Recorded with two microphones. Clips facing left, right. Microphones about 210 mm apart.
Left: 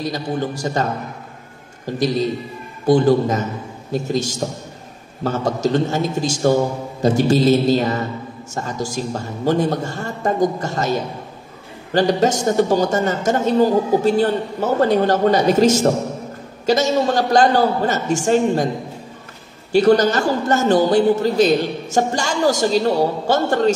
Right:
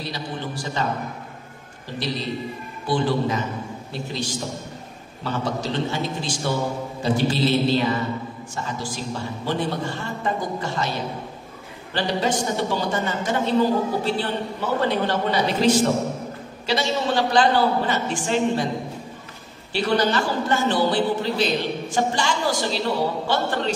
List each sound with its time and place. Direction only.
0.0 s a woman's voice: 45° left (ahead or behind)
2.0 s a woman's voice: 45° left (ahead or behind)
19.7 s a woman's voice: 45° left (ahead or behind)